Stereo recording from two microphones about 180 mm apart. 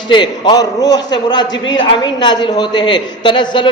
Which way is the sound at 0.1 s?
25° left (ahead or behind).